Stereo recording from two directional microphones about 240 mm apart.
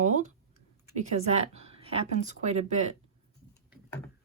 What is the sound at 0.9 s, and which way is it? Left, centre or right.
Speech, right.